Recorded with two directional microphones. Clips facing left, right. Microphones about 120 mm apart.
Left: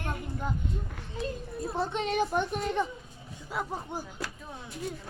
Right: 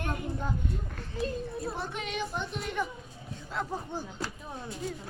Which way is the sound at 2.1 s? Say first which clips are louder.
Left 7 dB; 50° left (ahead or behind).